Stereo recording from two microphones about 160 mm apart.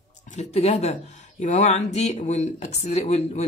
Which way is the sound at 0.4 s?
40° left (ahead or behind).